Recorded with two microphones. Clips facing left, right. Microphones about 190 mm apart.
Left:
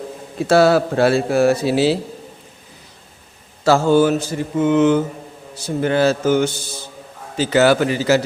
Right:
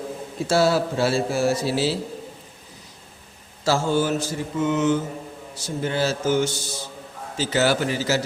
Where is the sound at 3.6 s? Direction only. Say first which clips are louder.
Left 8 dB; 60° left (ahead or behind).